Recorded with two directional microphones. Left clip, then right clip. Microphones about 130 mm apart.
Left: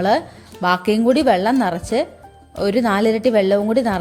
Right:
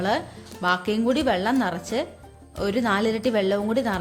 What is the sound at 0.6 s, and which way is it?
A woman's voice, 45° left (ahead or behind).